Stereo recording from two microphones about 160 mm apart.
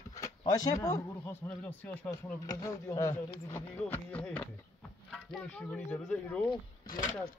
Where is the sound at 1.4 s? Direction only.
10° left (ahead or behind).